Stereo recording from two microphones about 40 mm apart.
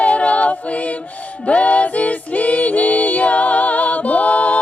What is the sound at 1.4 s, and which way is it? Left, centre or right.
Music, left.